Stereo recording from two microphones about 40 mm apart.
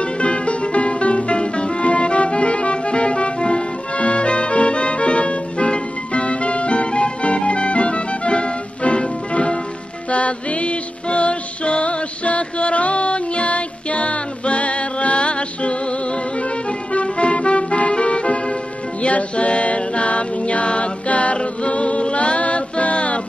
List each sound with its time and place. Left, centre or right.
0.0 s music: left
16.9 s music: left